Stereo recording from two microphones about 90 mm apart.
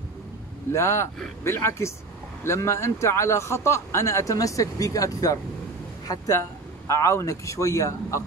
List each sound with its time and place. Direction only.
0.7 s speech: 30° left (ahead or behind)